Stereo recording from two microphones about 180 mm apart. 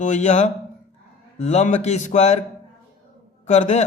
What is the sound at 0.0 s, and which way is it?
A man's voice, 40° left (ahead or behind).